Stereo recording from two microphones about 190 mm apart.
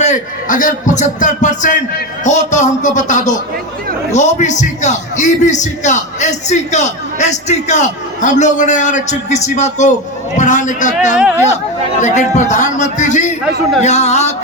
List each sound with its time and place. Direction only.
0.0 s a man's voice: 40° left (ahead or behind)
11.9 s a man's voice: 40° left (ahead or behind)